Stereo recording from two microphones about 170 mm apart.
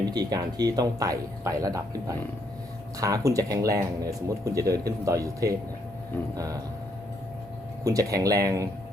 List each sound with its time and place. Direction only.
0.0 s speech: 25° right (ahead or behind)
6.3 s speech: 20° right (ahead or behind)
7.9 s speech: 20° right (ahead or behind)